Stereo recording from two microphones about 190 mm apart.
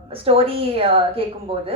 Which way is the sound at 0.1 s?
30° right (ahead or behind).